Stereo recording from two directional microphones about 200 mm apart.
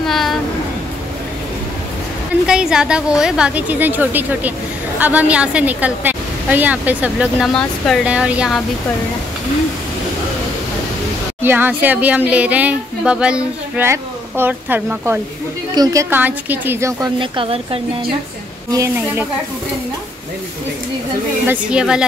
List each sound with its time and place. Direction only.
0.0 s a sound: centre (ahead or behind)
2.4 s a woman's voice: 5° right (ahead or behind)
11.4 s speech: 10° right (ahead or behind)
17.2 s speech: 25° right (ahead or behind)
18.7 s speech: 15° right (ahead or behind)
21.5 s a woman's voice: 5° right (ahead or behind)